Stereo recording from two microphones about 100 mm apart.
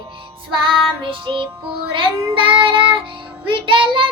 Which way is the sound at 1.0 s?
55° right (ahead or behind).